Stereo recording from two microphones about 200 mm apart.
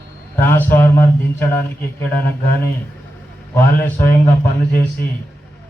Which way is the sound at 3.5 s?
10° left (ahead or behind).